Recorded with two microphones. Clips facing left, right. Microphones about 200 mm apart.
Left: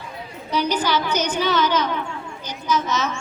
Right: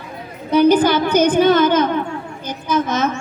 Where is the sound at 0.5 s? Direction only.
55° right (ahead or behind).